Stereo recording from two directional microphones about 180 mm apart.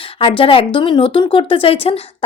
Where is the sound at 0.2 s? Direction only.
30° left (ahead or behind).